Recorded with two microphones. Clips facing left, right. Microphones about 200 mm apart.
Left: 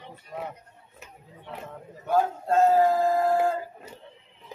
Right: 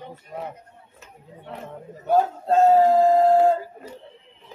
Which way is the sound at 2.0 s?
30° right (ahead or behind).